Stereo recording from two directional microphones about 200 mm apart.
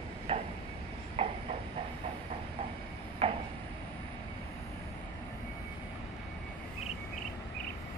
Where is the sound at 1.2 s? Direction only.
30° right (ahead or behind).